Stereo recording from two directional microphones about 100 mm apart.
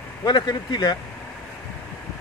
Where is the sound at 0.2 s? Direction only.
45° left (ahead or behind).